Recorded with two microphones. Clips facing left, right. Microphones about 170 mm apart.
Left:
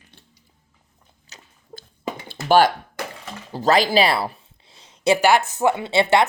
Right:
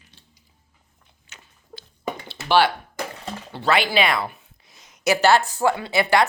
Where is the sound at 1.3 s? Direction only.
35° left (ahead or behind).